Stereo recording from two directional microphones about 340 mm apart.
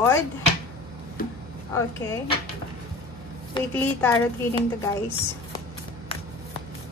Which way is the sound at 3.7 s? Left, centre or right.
Centre.